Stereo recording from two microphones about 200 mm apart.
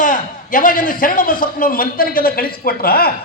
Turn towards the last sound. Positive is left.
turn(degrees=50)  # may be behind; listen again after turning